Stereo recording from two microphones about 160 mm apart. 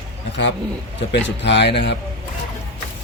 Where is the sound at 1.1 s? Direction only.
90° left.